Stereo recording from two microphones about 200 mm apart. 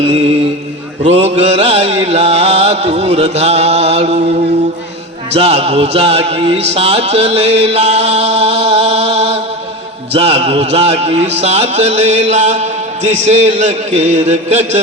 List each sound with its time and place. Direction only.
0.0 s music: 30° right (ahead or behind)
5.3 s music: 30° right (ahead or behind)